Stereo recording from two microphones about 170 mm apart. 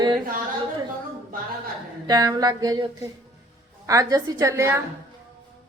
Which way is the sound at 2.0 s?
20° right (ahead or behind).